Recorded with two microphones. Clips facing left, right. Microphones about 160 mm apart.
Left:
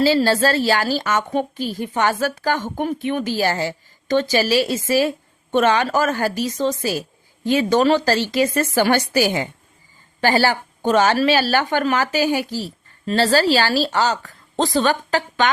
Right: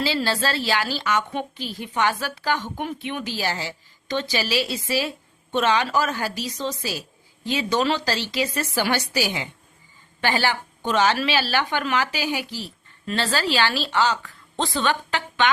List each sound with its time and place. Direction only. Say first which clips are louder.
0.0 s a woman's voice: left 8 dB; 40° left (ahead or behind)